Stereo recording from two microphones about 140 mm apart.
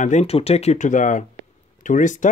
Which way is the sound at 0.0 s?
55° left (ahead or behind).